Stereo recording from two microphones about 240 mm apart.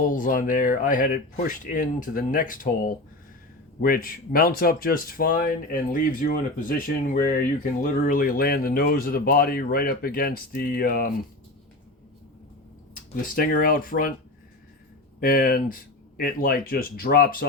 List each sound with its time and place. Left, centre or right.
0.0 s speech: left
13.2 s speech: left
15.2 s speech: left